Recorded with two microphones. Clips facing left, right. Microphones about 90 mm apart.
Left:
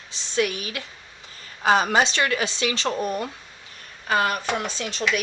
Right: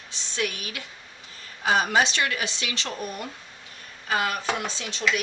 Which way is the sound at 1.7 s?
40° left (ahead or behind).